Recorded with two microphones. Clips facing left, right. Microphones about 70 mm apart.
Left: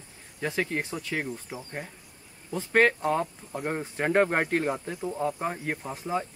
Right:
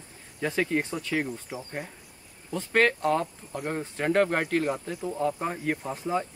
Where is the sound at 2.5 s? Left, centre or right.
Centre.